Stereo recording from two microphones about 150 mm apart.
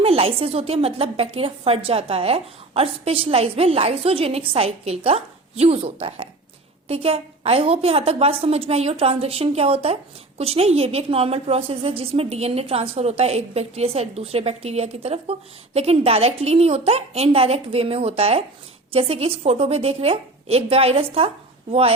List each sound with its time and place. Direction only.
0.0 s a woman's voice: 40° right (ahead or behind)